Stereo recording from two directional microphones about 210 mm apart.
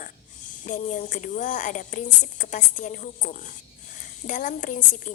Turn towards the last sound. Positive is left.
turn(degrees=40)  # may be behind; listen again after turning